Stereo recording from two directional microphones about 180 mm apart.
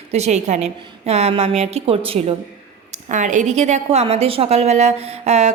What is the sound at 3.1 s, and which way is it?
A woman's voice, 45° right (ahead or behind).